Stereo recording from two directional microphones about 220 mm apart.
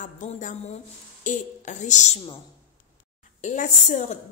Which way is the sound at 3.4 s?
35° left (ahead or behind).